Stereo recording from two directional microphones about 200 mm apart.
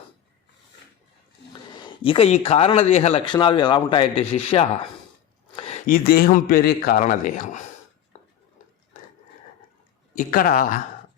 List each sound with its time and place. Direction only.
2.0 s speech: 30° left (ahead or behind)
5.5 s a sound: 30° left (ahead or behind)
5.8 s a man's voice: 45° left (ahead or behind)
10.2 s a man's voice: 45° left (ahead or behind)